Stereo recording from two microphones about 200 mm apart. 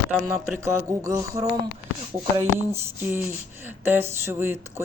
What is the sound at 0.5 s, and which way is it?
Speech, 15° right (ahead or behind).